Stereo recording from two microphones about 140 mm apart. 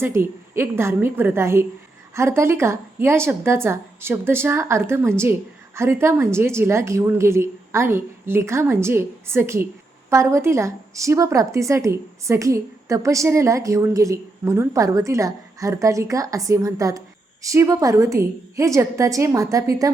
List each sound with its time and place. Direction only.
0.0 s a woman's voice: 15° right (ahead or behind)